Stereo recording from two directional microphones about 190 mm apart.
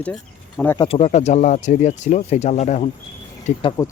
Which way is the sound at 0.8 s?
30° left (ahead or behind).